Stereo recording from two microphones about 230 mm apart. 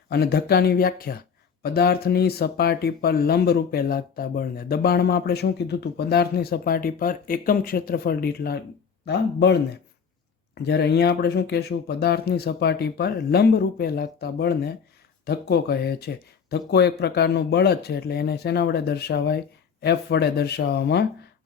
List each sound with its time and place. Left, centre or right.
0.1 s speech: left